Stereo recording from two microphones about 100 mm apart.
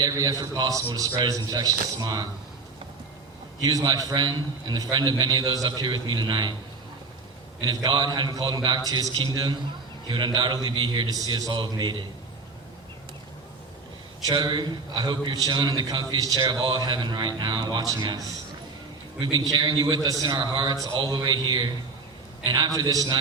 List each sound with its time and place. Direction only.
0.0 s a man's voice: 35° right (ahead or behind)
3.6 s a man's voice: 40° right (ahead or behind)
7.6 s a man's voice: 45° right (ahead or behind)
14.3 s a man's voice: 45° right (ahead or behind)
19.2 s a man's voice: 45° right (ahead or behind)